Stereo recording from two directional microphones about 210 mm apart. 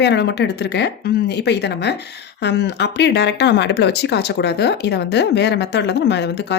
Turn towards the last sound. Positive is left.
turn(degrees=55)  # may be behind; listen again after turning